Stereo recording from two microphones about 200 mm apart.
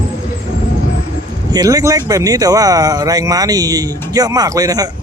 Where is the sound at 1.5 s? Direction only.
20° right (ahead or behind).